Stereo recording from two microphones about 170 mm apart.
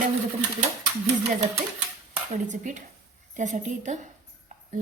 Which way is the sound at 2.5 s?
45° right (ahead or behind).